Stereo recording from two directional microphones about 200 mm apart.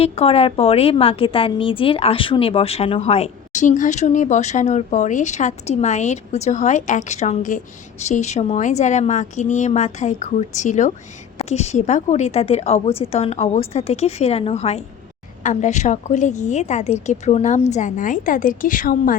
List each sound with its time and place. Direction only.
0.0 s a woman's voice: 30° left (ahead or behind)